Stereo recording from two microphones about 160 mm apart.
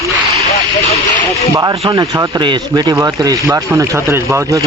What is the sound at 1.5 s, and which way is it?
Speech, 20° right (ahead or behind).